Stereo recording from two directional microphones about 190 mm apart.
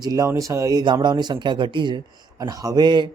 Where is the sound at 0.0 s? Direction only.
20° right (ahead or behind).